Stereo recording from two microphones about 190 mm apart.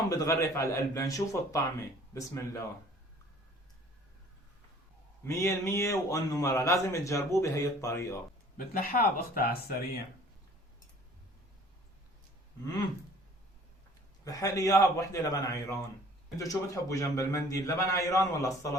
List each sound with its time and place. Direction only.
0.1 s a man's voice: 15° left (ahead or behind)
5.2 s a man's voice: 15° left (ahead or behind)
8.5 s speech: 50° left (ahead or behind)
14.3 s a man's voice: 20° left (ahead or behind)